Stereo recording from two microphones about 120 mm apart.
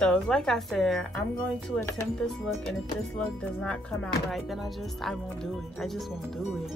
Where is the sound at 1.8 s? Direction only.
25° left (ahead or behind).